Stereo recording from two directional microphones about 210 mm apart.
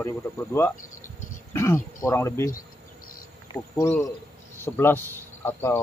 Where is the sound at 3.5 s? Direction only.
10° left (ahead or behind).